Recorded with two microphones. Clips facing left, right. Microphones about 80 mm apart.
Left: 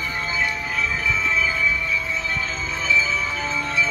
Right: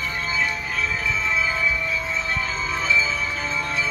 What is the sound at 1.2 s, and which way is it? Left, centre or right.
Music, centre.